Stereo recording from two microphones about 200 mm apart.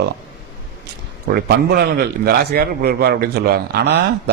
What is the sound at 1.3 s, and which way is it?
A man's voice, 55° right (ahead or behind).